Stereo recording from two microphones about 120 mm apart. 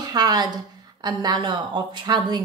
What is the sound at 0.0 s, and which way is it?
A woman's voice, 35° right (ahead or behind).